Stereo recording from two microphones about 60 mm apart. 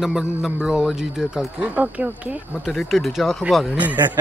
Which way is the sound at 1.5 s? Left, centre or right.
Right.